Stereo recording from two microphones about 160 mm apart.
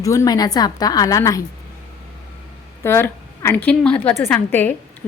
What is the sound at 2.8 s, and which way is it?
A woman's voice, 15° left (ahead or behind).